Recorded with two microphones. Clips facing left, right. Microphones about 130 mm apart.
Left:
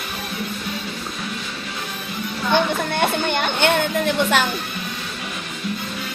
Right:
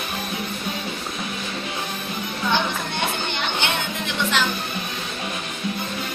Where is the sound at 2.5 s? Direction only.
50° left (ahead or behind).